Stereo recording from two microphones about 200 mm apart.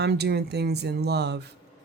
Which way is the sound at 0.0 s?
55° right (ahead or behind).